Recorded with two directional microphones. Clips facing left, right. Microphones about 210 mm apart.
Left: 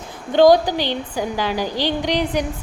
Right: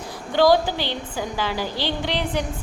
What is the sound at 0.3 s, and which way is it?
A woman's voice, 15° left (ahead or behind).